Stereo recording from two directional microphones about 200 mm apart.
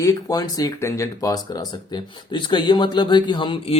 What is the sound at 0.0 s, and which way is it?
Speech, 20° left (ahead or behind).